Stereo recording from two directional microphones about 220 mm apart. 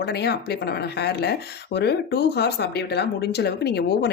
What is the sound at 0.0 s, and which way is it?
Speech, 50° left (ahead or behind).